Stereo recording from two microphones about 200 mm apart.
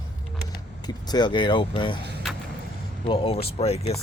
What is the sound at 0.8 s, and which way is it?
Speech, 20° left (ahead or behind).